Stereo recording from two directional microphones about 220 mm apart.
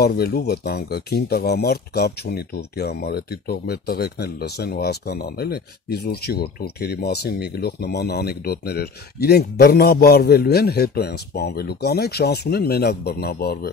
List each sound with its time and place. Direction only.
0.0 s speech: 45° left (ahead or behind)